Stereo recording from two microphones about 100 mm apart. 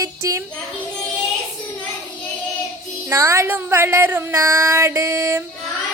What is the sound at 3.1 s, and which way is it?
A woman's voice, 30° right (ahead or behind).